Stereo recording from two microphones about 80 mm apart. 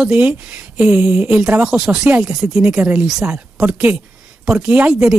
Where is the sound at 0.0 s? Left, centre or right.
Centre.